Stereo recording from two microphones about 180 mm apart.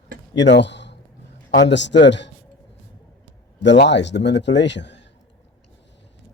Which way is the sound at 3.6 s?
80° left.